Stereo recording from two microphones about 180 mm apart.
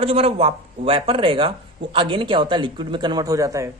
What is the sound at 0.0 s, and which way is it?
A woman's voice, 30° right (ahead or behind).